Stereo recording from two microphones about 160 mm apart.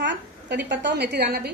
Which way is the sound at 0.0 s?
90° right.